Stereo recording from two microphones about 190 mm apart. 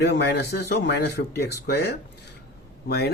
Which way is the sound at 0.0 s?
60° left (ahead or behind).